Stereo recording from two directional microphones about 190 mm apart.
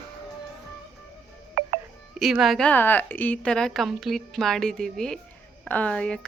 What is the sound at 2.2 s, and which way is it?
A woman's voice, centre (ahead or behind).